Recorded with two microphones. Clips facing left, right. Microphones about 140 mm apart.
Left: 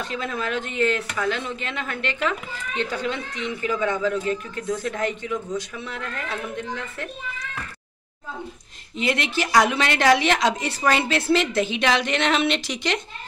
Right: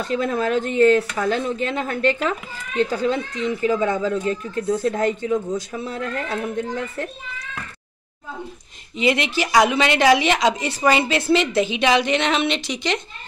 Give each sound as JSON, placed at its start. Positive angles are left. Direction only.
{"t": 0.0, "sound": "speech", "side_deg": -40}
{"t": 8.9, "sound": "a woman's voice", "side_deg": -5}